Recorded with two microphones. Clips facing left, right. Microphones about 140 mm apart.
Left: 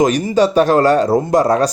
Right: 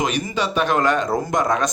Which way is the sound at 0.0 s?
40° left (ahead or behind).